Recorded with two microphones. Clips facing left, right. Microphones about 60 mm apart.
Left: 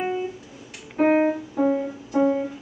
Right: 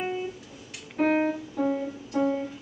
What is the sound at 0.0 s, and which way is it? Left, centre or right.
Music, centre.